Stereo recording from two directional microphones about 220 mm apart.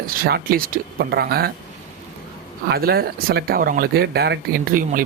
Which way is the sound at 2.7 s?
45° right (ahead or behind).